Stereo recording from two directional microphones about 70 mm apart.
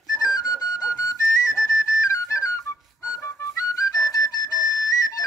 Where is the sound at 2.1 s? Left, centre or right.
Left.